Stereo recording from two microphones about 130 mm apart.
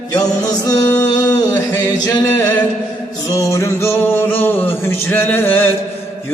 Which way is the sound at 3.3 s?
25° left (ahead or behind).